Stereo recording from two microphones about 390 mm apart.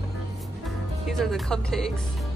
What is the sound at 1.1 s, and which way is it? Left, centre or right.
Speech, centre.